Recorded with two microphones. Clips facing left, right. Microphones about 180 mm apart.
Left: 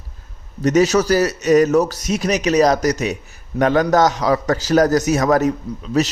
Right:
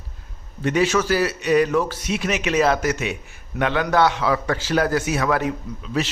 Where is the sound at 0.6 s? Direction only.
40° left (ahead or behind).